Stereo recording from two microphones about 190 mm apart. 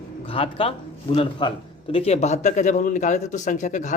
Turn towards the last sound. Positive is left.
turn(degrees=40)  # may be behind; listen again after turning